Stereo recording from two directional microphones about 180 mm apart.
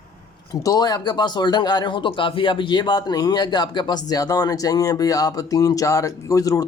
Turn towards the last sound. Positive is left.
turn(degrees=20)  # may be behind; listen again after turning